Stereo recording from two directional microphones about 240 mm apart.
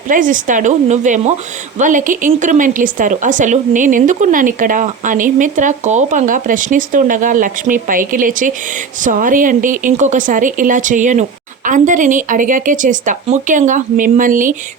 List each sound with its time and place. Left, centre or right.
0.1 s a woman's voice: right